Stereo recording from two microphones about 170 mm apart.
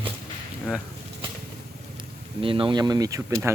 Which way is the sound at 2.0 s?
30° right (ahead or behind).